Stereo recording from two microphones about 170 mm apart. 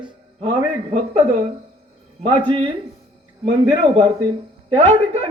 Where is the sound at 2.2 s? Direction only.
30° right (ahead or behind).